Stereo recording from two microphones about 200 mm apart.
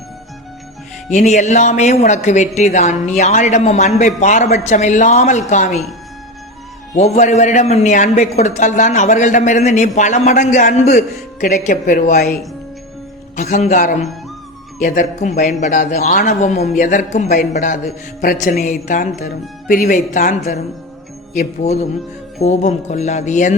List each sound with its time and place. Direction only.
1.1 s a man's voice: 35° left (ahead or behind)
6.9 s a man's voice: 35° left (ahead or behind)
21.6 s a man's voice: 35° left (ahead or behind)